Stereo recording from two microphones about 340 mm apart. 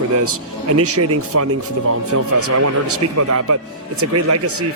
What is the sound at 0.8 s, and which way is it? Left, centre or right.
Speech, right.